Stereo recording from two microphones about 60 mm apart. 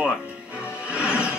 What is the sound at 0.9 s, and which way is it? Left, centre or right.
Music, centre.